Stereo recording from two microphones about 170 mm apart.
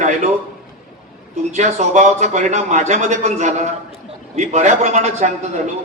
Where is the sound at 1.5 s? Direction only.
45° right (ahead or behind).